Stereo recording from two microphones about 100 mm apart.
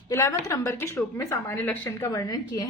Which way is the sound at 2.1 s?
40° left (ahead or behind).